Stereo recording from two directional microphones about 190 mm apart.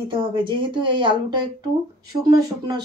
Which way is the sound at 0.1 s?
25° right (ahead or behind).